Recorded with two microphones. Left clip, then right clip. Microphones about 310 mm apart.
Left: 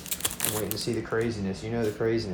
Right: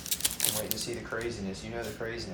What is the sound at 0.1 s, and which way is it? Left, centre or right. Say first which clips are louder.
Typing: left 1 dB; centre.